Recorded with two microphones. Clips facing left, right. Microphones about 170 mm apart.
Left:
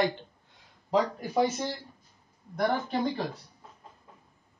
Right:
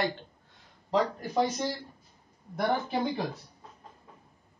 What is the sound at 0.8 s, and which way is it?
Speech, 5° left (ahead or behind).